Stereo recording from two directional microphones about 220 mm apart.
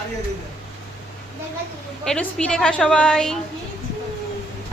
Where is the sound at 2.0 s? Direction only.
Centre (ahead or behind).